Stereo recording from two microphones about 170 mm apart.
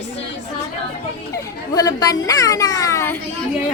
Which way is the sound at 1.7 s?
20° left (ahead or behind).